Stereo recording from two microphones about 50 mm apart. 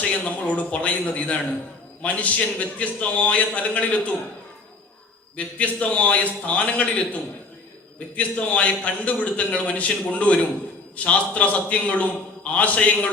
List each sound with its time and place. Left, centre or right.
0.1 s a man's voice: left
5.5 s a man's voice: left